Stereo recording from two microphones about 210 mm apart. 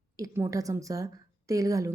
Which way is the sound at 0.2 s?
15° right (ahead or behind).